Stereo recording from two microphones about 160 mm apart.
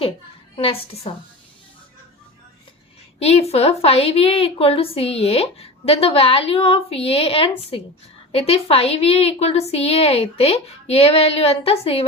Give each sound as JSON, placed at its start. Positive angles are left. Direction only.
{"t": 0.5, "sound": "a woman's voice", "side_deg": 35}
{"t": 3.2, "sound": "a woman's voice", "side_deg": 40}